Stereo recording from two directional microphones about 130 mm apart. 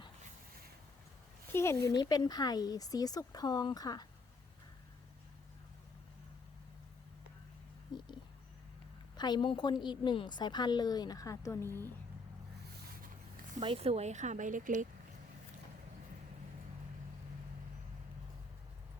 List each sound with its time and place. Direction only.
1.5 s speech: 20° left (ahead or behind)
1.9 s a woman's voice: 30° left (ahead or behind)
7.9 s a sound: 35° left (ahead or behind)
9.1 s a woman's voice: 35° left (ahead or behind)
13.6 s speech: 45° right (ahead or behind); by 14.8 s 80° right